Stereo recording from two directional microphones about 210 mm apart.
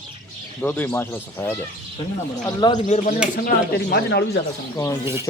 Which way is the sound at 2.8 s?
35° left (ahead or behind).